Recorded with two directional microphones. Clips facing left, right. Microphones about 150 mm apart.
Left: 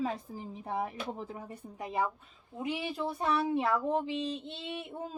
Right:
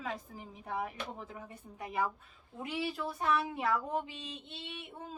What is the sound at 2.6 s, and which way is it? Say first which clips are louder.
A woman's voice: left 3 dB; 20° left (ahead or behind).